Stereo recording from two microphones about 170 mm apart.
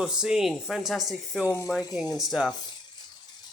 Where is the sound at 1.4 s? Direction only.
15° left (ahead or behind).